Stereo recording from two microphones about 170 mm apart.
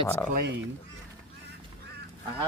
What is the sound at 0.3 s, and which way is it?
Speech, 80° right.